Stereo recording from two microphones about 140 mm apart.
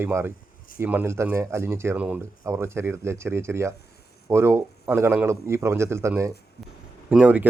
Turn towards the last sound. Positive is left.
turn(degrees=-10)  # may be behind; listen again after turning